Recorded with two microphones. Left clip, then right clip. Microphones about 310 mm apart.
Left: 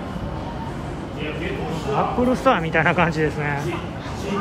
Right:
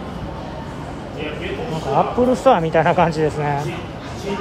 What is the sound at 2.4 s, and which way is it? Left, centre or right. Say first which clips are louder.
Speech: right 4 dB; centre.